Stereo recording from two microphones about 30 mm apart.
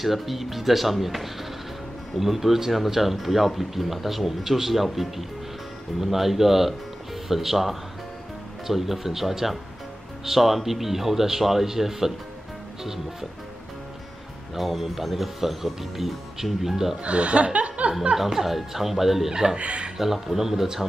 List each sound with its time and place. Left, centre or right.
0.0 s speech: centre
5.9 s speech: centre
14.5 s speech: centre
17.0 s speech: right
18.1 s speech: centre
19.6 s speech: right
20.0 s speech: centre